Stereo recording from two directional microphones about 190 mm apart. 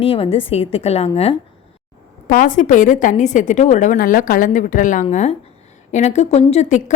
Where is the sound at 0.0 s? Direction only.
30° left (ahead or behind).